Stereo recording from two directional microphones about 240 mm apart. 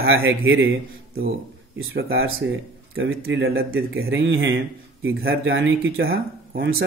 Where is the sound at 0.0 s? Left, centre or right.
Right.